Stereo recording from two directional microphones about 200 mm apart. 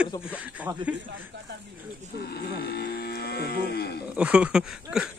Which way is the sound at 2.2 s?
50° left (ahead or behind).